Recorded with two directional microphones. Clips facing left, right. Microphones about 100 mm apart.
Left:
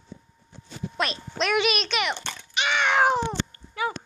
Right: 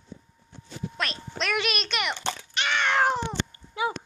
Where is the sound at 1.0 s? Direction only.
5° left (ahead or behind).